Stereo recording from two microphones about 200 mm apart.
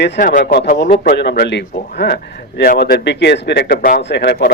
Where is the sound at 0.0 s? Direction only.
45° left (ahead or behind).